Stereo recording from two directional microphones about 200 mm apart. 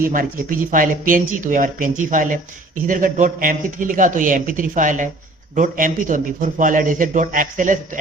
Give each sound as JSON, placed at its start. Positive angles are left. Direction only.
{"t": 0.1, "sound": "speech", "side_deg": -45}